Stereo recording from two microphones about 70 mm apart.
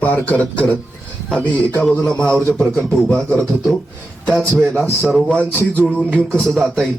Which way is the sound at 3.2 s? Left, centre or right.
Centre.